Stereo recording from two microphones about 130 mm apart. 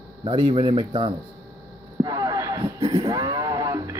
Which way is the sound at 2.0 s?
30° right (ahead or behind).